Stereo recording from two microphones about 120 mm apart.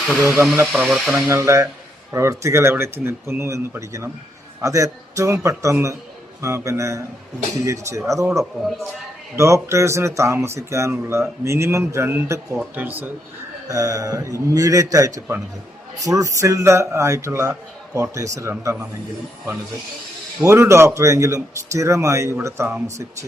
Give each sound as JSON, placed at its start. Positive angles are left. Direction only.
{"t": 0.1, "sound": "a man's voice", "side_deg": -20}
{"t": 0.9, "sound": "speech", "side_deg": -5}
{"t": 1.3, "sound": "a man's voice", "side_deg": -25}
{"t": 9.3, "sound": "a man's voice", "side_deg": -25}
{"t": 13.7, "sound": "a man's voice", "side_deg": -30}
{"t": 20.4, "sound": "a man's voice", "side_deg": -25}